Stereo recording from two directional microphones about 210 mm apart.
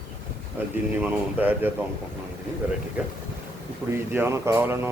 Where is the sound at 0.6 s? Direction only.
10° right (ahead or behind).